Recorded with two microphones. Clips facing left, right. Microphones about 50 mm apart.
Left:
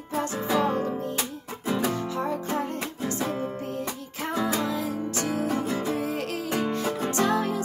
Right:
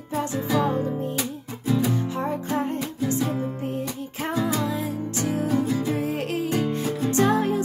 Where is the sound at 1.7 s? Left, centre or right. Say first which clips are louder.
Right 3 dB; left.